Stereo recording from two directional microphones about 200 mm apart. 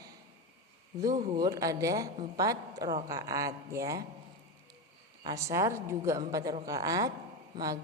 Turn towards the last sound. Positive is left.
turn(degrees=-15)  # may be behind; listen again after turning